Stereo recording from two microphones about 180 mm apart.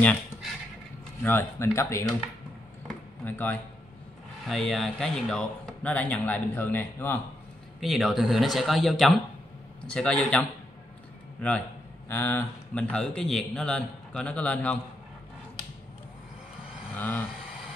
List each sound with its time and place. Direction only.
1.2 s speech: 15° left (ahead or behind)
2.9 s a sound: 10° left (ahead or behind)
4.5 s speech: centre (ahead or behind)
7.8 s speech: centre (ahead or behind)
12.1 s speech: 15° left (ahead or behind)
16.9 s vehicle: 10° left (ahead or behind)